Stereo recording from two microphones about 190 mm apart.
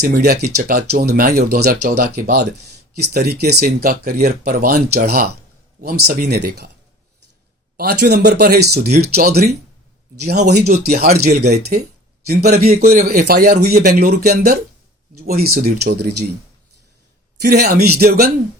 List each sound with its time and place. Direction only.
0.0 s speech: 55° right (ahead or behind)
7.8 s speech: 55° right (ahead or behind)
10.7 s speech: 40° right (ahead or behind)
12.7 s speech: 40° right (ahead or behind); by 16.1 s 60° right (ahead or behind)
17.4 s speech: 60° right (ahead or behind)